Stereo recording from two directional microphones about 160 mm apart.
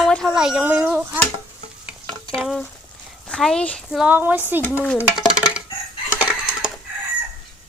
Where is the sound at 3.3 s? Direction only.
5° left (ahead or behind).